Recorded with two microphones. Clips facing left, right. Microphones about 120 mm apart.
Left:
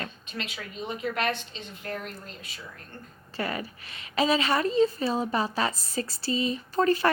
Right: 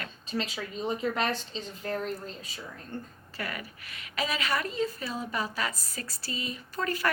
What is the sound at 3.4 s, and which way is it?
A woman's voice, 30° left (ahead or behind).